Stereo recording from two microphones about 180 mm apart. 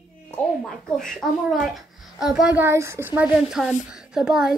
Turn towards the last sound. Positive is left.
turn(degrees=-5)  # may be behind; listen again after turning